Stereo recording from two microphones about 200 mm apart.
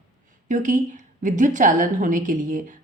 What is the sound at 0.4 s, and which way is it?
A woman's voice, 40° right (ahead or behind).